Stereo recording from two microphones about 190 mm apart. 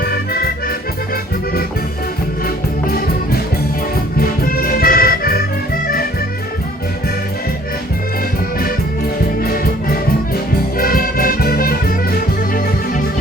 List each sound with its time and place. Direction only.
0.0 s accordion: 55° left (ahead or behind)
4.2 s music: 50° left (ahead or behind)
9.4 s music: 50° left (ahead or behind)